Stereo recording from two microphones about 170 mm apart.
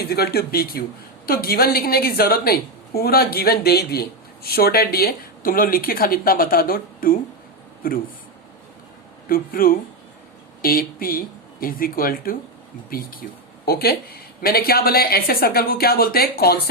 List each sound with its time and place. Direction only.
0.0 s a woman's voice: 65° left (ahead or behind)
9.3 s a woman's voice: 55° left (ahead or behind)